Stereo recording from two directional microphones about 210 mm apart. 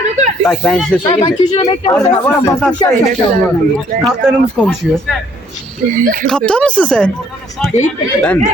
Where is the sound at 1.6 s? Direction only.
25° left (ahead or behind).